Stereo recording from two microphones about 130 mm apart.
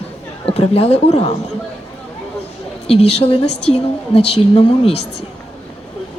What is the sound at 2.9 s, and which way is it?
A woman's voice, 50° left (ahead or behind).